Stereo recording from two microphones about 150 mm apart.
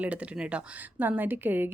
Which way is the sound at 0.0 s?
10° right (ahead or behind).